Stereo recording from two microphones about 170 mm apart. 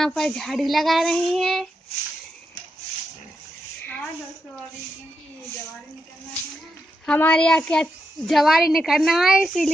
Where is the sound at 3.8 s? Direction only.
10° left (ahead or behind).